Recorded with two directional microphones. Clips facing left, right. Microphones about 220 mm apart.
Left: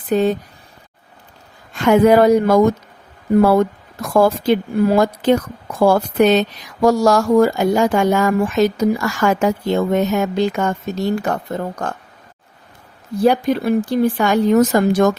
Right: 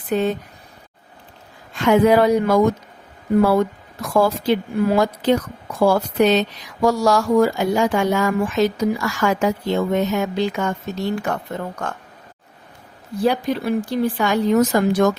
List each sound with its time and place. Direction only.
0.1 s speech: 40° left (ahead or behind)
1.8 s speech: 45° left (ahead or behind)
4.1 s speech: 45° left (ahead or behind)
13.2 s speech: 50° left (ahead or behind)